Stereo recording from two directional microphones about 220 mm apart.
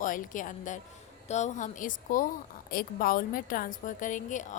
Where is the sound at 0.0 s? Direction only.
35° left (ahead or behind).